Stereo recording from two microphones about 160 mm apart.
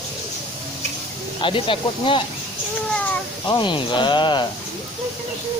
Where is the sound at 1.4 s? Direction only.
35° left (ahead or behind).